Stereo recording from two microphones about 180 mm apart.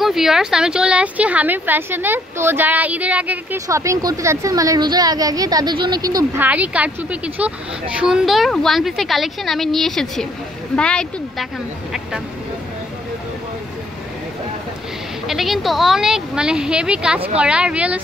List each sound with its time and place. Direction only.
0.0 s speech: centre (ahead or behind); by 6.4 s 20° right (ahead or behind)
6.4 s a woman's voice: 10° right (ahead or behind)
15.2 s a woman's voice: centre (ahead or behind)